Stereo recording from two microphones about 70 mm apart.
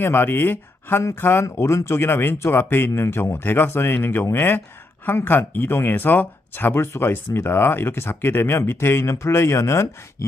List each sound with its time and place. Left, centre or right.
0.0 s speech: left
1.5 s speech: left